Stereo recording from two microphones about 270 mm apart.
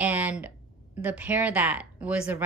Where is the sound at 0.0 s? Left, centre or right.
Centre.